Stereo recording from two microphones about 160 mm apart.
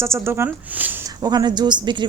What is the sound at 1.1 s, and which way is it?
Speech, 25° right (ahead or behind).